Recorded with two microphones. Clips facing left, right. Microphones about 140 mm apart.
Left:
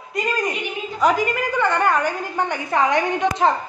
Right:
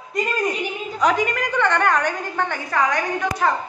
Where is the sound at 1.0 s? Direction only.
5° left (ahead or behind).